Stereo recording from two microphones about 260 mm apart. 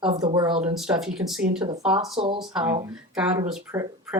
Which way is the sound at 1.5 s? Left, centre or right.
Centre.